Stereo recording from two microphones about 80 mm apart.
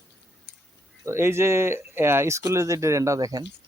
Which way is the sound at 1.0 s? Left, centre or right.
Right.